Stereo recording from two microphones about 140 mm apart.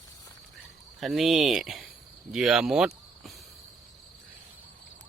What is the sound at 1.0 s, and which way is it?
Speech, centre (ahead or behind).